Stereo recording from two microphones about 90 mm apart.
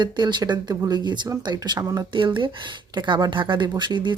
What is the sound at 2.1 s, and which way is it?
Speech, 65° right (ahead or behind).